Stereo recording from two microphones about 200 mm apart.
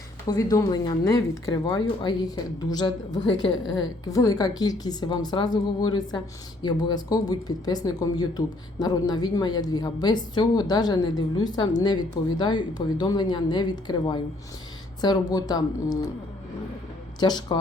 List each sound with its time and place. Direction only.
0.3 s a woman's voice: 20° left (ahead or behind)
17.2 s a woman's voice: 20° left (ahead or behind)